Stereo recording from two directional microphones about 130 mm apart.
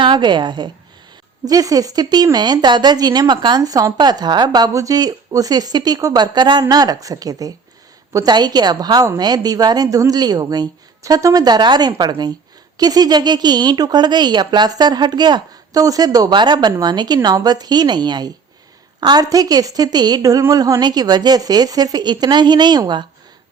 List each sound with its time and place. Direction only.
0.0 s a woman's voice: 35° right (ahead or behind)